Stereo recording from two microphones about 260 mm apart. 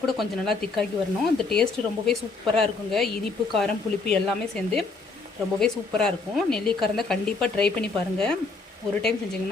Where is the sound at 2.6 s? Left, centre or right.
Centre.